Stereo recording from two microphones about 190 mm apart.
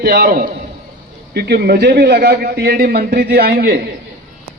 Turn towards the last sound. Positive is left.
turn(degrees=-55)  # may be behind; listen again after turning